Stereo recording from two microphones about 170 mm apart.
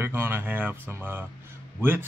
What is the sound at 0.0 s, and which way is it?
Speech, 15° right (ahead or behind).